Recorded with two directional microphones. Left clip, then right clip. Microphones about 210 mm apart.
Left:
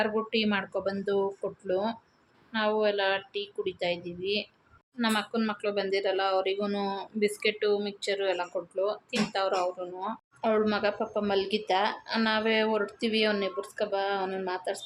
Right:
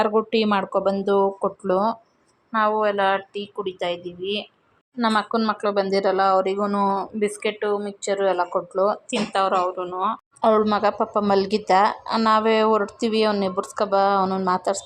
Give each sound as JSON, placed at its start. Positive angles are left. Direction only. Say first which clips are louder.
{"t": 0.0, "sound": "speech", "louder": "right 8 dB", "side_deg": -25}
{"t": 3.7, "sound": "speech", "louder": "right 5 dB", "side_deg": 25}
{"t": 4.9, "sound": "speech", "louder": "right 8 dB", "side_deg": -15}
{"t": 8.7, "sound": "speech", "louder": "right 8 dB", "side_deg": -30}
{"t": 9.3, "sound": "speech", "louder": "right 9 dB", "side_deg": -5}
{"t": 10.4, "sound": "speech", "louder": "right 8 dB", "side_deg": -25}